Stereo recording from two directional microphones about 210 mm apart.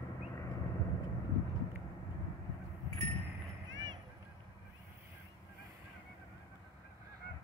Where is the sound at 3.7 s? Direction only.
65° right (ahead or behind).